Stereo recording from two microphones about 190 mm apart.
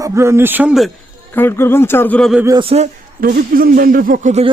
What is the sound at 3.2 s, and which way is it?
Speech, 50° right (ahead or behind).